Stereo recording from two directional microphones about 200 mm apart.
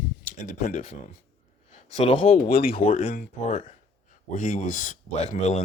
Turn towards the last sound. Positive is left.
turn(degrees=35)  # may be behind; listen again after turning